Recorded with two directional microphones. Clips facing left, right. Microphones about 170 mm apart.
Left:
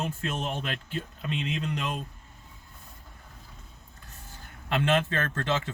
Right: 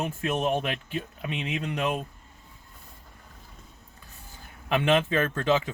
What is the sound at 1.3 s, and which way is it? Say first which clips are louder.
Speech: even; 65° right (ahead or behind).